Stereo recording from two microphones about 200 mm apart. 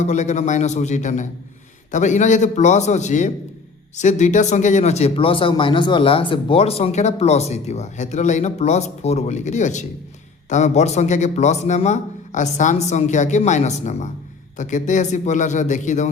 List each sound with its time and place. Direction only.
0.0 s speech: 35° left (ahead or behind)